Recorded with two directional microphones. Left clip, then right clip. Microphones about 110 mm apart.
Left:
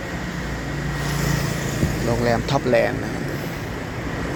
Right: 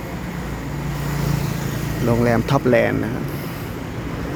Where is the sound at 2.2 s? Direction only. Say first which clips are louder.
Right 2 dB; 45° right (ahead or behind).